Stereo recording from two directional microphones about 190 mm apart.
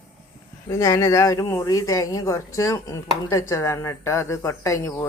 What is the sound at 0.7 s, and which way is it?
Speech, 15° left (ahead or behind).